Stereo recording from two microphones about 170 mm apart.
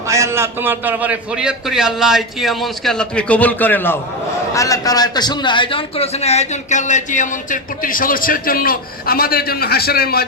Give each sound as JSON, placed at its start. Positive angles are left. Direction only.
{"t": 0.1, "sound": "a man's voice", "side_deg": -15}